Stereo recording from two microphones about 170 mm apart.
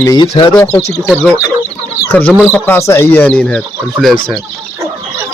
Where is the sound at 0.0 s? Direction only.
25° left (ahead or behind).